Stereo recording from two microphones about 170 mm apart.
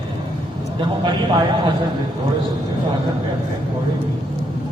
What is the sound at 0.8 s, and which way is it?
Speech, 25° right (ahead or behind).